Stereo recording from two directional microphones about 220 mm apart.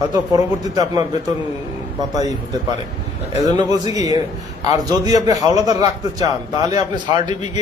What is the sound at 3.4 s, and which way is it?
A man's voice, 15° right (ahead or behind).